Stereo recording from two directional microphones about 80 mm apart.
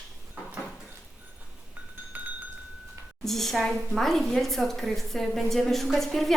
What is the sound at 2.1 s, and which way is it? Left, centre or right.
Chink, right.